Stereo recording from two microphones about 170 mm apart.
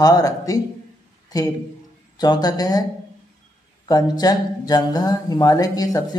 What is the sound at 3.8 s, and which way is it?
Speech, 20° left (ahead or behind).